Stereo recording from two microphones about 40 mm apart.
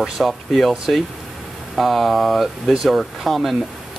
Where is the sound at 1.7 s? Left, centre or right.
Centre.